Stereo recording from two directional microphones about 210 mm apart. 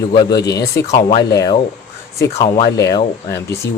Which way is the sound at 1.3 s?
15° left (ahead or behind).